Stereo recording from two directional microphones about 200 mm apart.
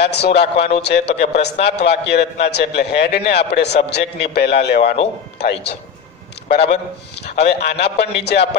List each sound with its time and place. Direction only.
0.1 s a man's voice: 55° left (ahead or behind)
7.2 s a man's voice: 55° left (ahead or behind)